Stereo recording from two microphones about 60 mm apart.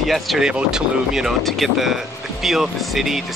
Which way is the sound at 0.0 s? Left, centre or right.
Centre.